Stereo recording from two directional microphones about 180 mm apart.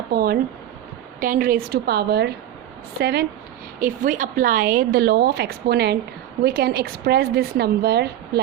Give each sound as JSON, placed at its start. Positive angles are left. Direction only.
{"t": 0.1, "sound": "a woman's voice", "side_deg": -60}
{"t": 3.8, "sound": "a woman's voice", "side_deg": -45}